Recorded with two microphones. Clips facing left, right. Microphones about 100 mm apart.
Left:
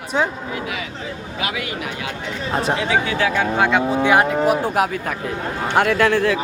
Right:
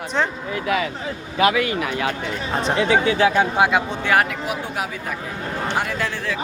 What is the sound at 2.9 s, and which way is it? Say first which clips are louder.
Speech: right 5 dB; 30° right (ahead or behind).